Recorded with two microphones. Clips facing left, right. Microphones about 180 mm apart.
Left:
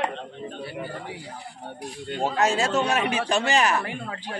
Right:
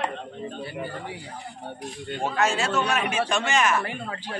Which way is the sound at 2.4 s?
35° left (ahead or behind).